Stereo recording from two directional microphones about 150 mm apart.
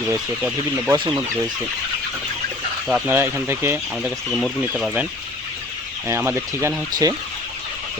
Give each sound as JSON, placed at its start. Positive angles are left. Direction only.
{"t": 0.1, "sound": "speech", "side_deg": -20}
{"t": 2.8, "sound": "speech", "side_deg": -10}
{"t": 4.3, "sound": "speech", "side_deg": 0}
{"t": 4.7, "sound": "speech", "side_deg": -10}
{"t": 6.1, "sound": "speech", "side_deg": -15}